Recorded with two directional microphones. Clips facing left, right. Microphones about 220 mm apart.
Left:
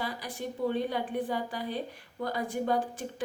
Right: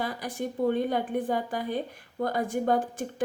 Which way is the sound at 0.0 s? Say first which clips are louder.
Right 4 dB; 50° right (ahead or behind).